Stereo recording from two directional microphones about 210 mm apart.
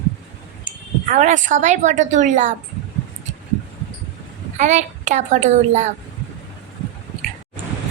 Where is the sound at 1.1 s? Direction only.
35° right (ahead or behind).